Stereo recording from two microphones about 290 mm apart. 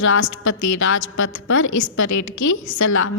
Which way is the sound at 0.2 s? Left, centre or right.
Left.